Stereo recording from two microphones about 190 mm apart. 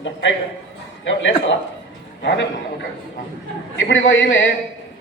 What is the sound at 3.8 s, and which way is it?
Speech, 80° left.